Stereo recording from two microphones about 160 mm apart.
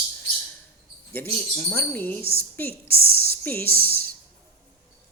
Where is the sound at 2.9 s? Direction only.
70° right (ahead or behind).